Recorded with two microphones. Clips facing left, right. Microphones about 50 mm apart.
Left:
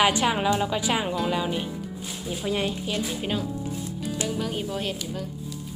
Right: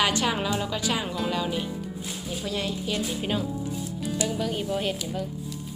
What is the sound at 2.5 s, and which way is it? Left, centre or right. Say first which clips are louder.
Speech: left 4 dB; left.